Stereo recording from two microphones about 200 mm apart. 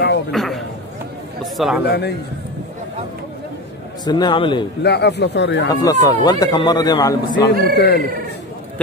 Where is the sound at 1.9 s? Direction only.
55° left (ahead or behind).